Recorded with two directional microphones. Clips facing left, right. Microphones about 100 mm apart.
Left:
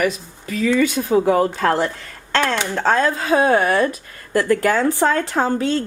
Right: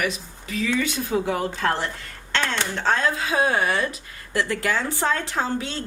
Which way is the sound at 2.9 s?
40° left (ahead or behind).